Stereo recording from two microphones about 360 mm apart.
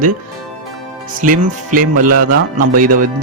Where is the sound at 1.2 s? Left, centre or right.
Right.